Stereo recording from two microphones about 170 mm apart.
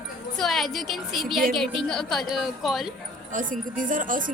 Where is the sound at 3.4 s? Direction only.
50° right (ahead or behind).